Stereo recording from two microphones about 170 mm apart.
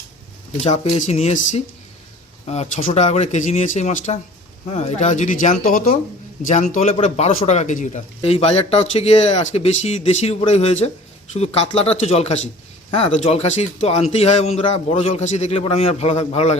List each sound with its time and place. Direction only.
0.6 s speech: 40° left (ahead or behind); by 5.9 s 55° left (ahead or behind)
6.4 s speech: 45° left (ahead or behind)